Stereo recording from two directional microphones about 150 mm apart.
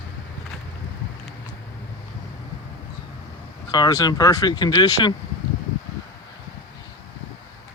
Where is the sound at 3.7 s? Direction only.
25° left (ahead or behind).